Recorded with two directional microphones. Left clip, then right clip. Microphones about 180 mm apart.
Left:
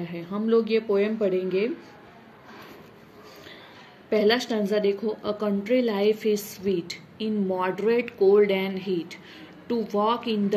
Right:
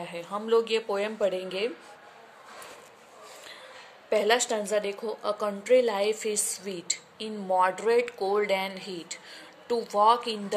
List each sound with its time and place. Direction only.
0.0 s speech: 30° right (ahead or behind)
4.1 s a woman's voice: 30° right (ahead or behind)